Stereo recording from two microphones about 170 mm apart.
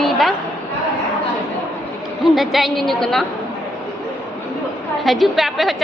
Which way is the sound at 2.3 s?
Centre (ahead or behind).